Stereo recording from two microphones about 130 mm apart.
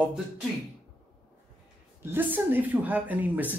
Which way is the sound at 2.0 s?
15° right (ahead or behind).